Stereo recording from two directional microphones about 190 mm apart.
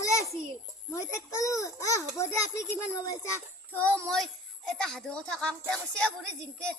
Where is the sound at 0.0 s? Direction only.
15° left (ahead or behind).